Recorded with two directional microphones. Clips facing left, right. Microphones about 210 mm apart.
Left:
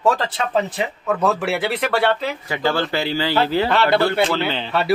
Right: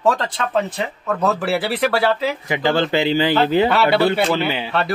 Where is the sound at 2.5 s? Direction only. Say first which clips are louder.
Right 2 dB; 20° right (ahead or behind).